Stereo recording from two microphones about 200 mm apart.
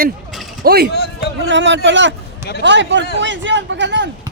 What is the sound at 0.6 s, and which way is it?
Speech, 50° right (ahead or behind).